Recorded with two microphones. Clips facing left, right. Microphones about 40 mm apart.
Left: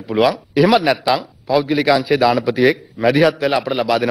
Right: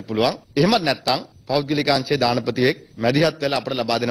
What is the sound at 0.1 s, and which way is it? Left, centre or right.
Speech, left.